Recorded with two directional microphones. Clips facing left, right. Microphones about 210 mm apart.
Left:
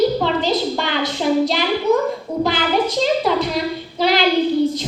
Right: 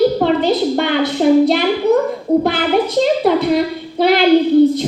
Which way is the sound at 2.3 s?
30° right (ahead or behind).